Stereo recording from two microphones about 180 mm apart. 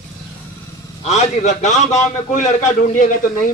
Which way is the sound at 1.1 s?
40° left (ahead or behind).